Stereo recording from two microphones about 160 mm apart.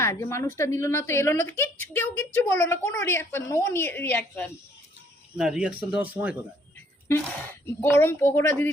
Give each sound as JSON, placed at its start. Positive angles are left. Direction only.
{"t": 0.0, "sound": "a woman's voice", "side_deg": 15}
{"t": 5.4, "sound": "speech", "side_deg": -5}
{"t": 7.8, "sound": "a woman's voice", "side_deg": 15}